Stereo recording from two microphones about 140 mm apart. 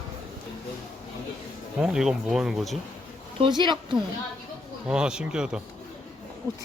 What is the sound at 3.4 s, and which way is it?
Speech, 30° right (ahead or behind).